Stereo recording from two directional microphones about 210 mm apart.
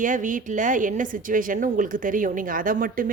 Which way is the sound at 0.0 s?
40° right (ahead or behind).